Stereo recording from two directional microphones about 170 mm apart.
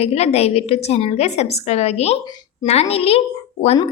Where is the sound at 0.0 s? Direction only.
40° left (ahead or behind).